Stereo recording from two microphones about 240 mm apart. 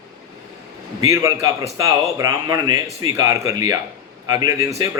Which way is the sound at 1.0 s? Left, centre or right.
Centre.